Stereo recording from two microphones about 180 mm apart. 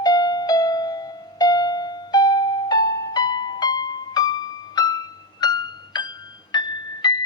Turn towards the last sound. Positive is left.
turn(degrees=25)  # may be behind; listen again after turning